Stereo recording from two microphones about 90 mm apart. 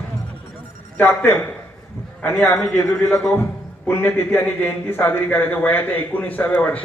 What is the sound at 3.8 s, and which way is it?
A man's voice, 25° left (ahead or behind).